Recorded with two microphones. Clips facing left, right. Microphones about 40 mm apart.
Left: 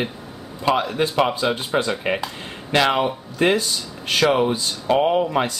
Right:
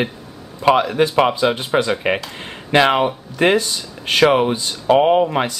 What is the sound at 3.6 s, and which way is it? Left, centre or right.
Speech, right.